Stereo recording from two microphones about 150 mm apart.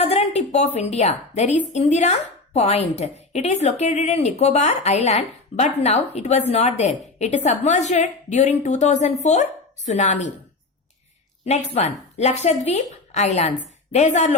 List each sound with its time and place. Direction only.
0.0 s a woman's voice: 45° left (ahead or behind)
11.4 s a woman's voice: 50° left (ahead or behind)